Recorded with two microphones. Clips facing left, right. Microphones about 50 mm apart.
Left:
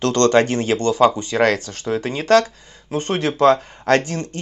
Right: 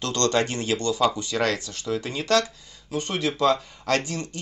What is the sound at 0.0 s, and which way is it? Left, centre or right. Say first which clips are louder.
Speech: left 8 dB; left.